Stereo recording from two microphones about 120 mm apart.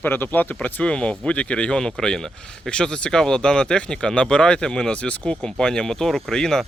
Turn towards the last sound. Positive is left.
turn(degrees=5)  # may be behind; listen again after turning